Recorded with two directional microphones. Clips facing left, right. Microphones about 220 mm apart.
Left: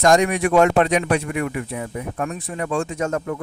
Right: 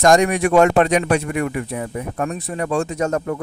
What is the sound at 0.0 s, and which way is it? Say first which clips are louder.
A man's voice: right 2 dB; 45° right (ahead or behind).